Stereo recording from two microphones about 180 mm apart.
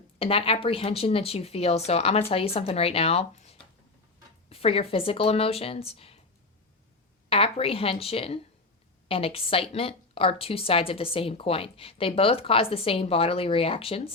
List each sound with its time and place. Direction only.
0.2 s a woman's voice: 30° left (ahead or behind)
7.3 s a woman's voice: 30° left (ahead or behind)